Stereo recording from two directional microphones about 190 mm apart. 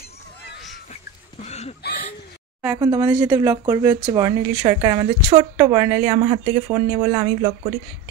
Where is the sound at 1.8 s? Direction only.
55° left (ahead or behind).